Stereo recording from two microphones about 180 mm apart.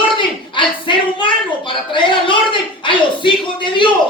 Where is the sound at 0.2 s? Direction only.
25° left (ahead or behind).